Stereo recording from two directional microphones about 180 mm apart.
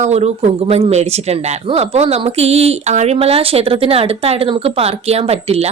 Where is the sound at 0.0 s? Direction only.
35° right (ahead or behind).